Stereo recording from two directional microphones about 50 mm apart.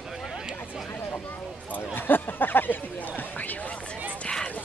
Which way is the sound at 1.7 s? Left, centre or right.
Left.